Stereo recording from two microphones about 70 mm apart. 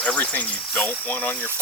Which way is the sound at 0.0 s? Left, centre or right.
Centre.